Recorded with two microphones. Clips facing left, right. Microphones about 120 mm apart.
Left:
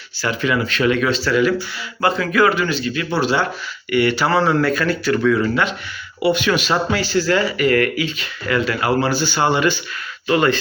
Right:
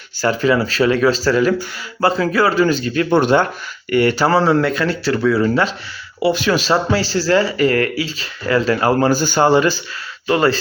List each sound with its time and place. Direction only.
0.2 s speech: 35° right (ahead or behind); by 3.4 s 50° right (ahead or behind)
3.8 s speech: 40° right (ahead or behind)
4.6 s speech: 25° right (ahead or behind)